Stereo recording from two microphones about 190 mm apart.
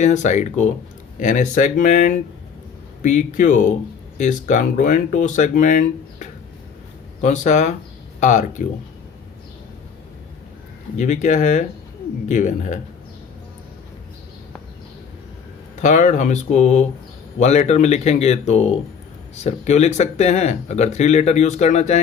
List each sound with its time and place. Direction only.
0.0 s speech: 40° left (ahead or behind)
10.9 s speech: 40° left (ahead or behind)
15.8 s speech: 40° left (ahead or behind)